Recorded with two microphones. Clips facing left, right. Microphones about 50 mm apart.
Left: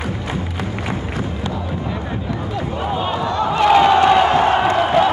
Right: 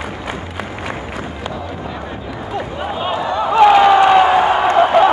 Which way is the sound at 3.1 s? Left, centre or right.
Centre.